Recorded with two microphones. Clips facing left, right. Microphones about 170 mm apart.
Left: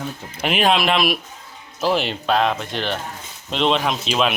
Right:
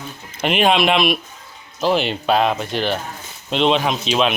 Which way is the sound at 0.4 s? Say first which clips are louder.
Right 2 dB; centre (ahead or behind).